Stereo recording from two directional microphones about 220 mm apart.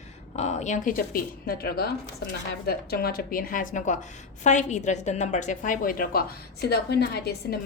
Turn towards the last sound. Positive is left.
turn(degrees=45)  # may be behind; listen again after turning